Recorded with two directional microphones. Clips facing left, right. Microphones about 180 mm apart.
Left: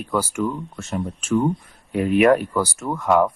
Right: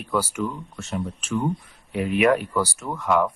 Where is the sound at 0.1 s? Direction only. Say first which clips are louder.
Left 2 dB; 45° left (ahead or behind).